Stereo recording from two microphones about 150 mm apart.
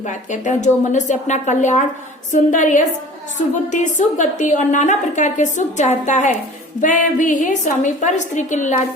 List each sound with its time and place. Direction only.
0.0 s a woman's voice: 55° left (ahead or behind)